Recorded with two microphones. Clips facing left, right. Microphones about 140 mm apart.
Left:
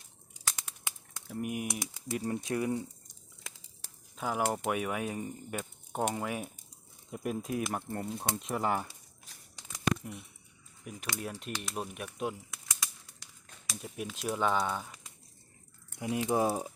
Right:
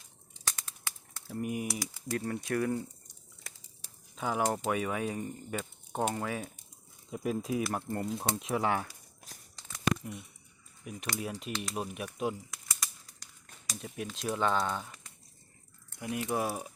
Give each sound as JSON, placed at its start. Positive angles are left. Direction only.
{"t": 0.3, "sound": "crumpling", "side_deg": 10}
{"t": 1.8, "sound": "speech", "side_deg": 20}
{"t": 4.1, "sound": "speech", "side_deg": 5}
{"t": 9.3, "sound": "a sound", "side_deg": -40}
{"t": 10.0, "sound": "speech", "side_deg": 0}
{"t": 16.0, "sound": "speech", "side_deg": 20}